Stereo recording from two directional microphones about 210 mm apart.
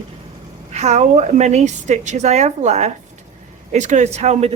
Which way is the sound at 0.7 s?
35° right (ahead or behind).